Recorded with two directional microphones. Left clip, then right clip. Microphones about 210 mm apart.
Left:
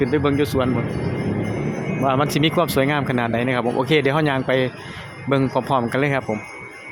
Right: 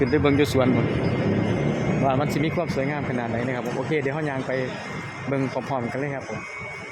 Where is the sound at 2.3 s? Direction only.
20° left (ahead or behind).